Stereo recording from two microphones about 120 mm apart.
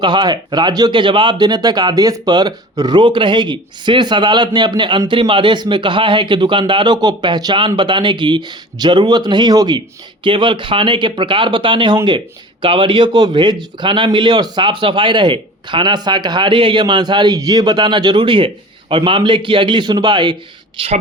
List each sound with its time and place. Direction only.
0.0 s speech: 40° right (ahead or behind)
10.2 s speech: 45° right (ahead or behind)
20.7 s speech: 55° right (ahead or behind)